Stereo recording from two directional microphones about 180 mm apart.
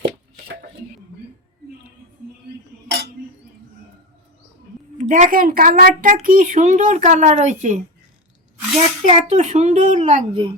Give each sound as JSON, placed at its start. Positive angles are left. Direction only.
{"t": 5.0, "sound": "speech", "side_deg": -45}
{"t": 9.0, "sound": "speech", "side_deg": -40}